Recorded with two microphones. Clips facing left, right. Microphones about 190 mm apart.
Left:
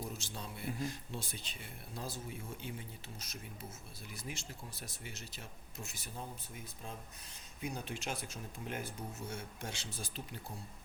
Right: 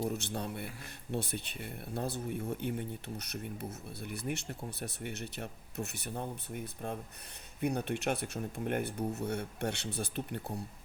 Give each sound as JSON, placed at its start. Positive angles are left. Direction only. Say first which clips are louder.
{"t": 0.0, "sound": "speech", "louder": "right 9 dB", "side_deg": -60}